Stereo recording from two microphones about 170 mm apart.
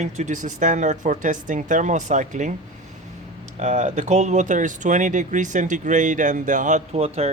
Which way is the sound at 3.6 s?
40° right (ahead or behind).